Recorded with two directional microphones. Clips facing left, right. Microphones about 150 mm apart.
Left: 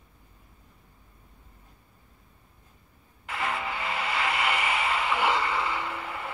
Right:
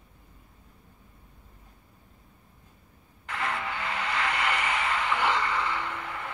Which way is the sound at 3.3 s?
5° left (ahead or behind).